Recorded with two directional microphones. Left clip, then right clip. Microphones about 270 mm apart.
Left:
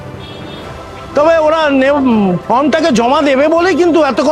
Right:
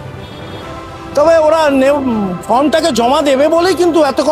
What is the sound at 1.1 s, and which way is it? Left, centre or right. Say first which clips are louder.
Speech: right 1 dB; left.